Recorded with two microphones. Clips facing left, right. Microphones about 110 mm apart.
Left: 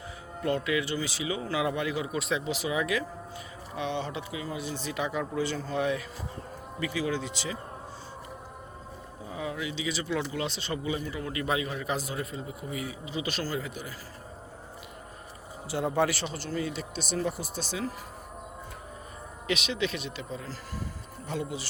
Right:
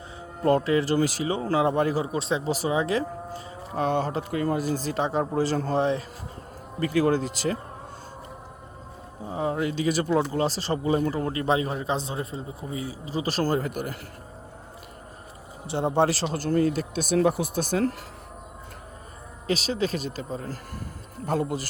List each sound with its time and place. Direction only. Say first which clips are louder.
0.4 s speech: right 7 dB; 35° right (ahead or behind)
6.7 s speech: right 8 dB; 50° right (ahead or behind)
9.2 s speech: right 8 dB; 35° right (ahead or behind)
15.6 s speech: right 4 dB; 25° right (ahead or behind)
16.2 s speech: right 9 dB; 50° right (ahead or behind)
17.2 s speech: right 10 dB; 60° right (ahead or behind)
19.5 s speech: right 4 dB; 35° right (ahead or behind)